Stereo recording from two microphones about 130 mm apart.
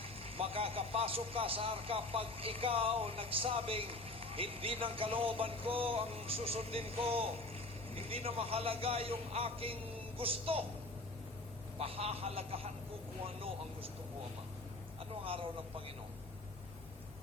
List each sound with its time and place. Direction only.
0.0 s a man's voice: 45° right (ahead or behind)
11.8 s a man's voice: 50° right (ahead or behind)
15.2 s a man's voice: 45° right (ahead or behind)